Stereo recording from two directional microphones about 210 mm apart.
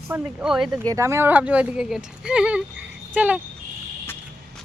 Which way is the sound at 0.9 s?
15° right (ahead or behind).